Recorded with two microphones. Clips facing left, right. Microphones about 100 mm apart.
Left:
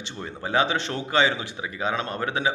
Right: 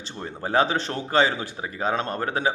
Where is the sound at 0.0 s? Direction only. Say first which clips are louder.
Right 1 dB; 40° right (ahead or behind).